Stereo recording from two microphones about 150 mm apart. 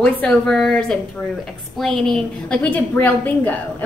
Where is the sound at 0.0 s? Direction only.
5° left (ahead or behind).